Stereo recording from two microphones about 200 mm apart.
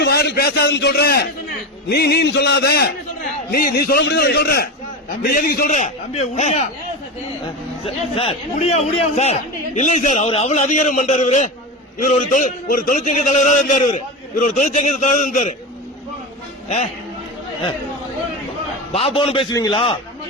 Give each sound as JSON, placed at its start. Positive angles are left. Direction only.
{"t": 0.0, "sound": "a sound", "side_deg": 55}
{"t": 1.9, "sound": "a man's voice", "side_deg": 55}
{"t": 7.9, "sound": "a man's voice", "side_deg": 30}
{"t": 16.6, "sound": "a man's voice", "side_deg": 35}
{"t": 18.9, "sound": "a man's voice", "side_deg": 25}